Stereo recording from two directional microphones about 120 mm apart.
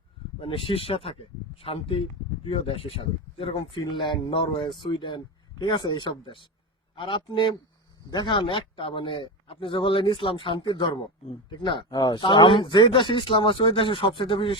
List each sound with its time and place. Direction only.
0.3 s a man's voice: 50° left (ahead or behind)